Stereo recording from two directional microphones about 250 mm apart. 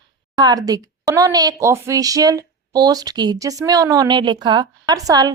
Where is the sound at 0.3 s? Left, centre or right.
Centre.